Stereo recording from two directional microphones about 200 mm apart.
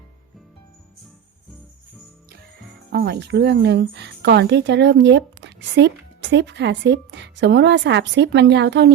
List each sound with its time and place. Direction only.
2.9 s speech: 55° right (ahead or behind)